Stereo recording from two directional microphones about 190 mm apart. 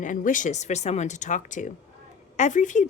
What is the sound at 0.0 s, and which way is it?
A woman's voice, 45° left (ahead or behind).